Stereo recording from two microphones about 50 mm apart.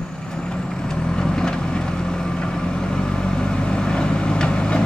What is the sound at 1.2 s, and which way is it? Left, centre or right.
Vehicle, centre.